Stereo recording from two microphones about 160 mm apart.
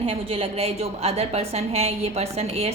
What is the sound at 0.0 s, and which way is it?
A woman's voice, 40° right (ahead or behind).